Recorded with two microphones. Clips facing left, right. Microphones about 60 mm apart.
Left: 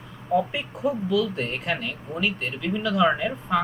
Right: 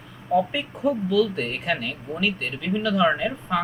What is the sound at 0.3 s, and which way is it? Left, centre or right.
Speech, centre.